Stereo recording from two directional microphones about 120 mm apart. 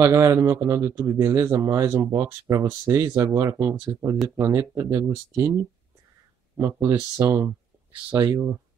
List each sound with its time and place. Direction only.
0.0 s speech: 25° right (ahead or behind)
8.1 s speech: 30° right (ahead or behind)